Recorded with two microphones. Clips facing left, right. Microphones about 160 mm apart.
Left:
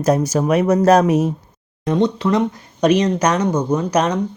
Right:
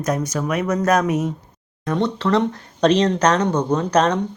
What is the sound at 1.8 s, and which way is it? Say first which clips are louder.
A man's voice: left 3 dB; 15° left (ahead or behind).